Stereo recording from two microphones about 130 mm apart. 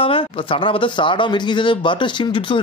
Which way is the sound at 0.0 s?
45° left (ahead or behind).